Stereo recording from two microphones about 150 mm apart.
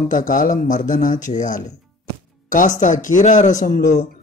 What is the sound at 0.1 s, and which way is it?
Speech, 60° left (ahead or behind).